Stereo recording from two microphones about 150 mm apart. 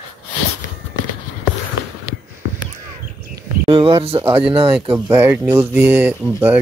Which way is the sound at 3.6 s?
40° right (ahead or behind).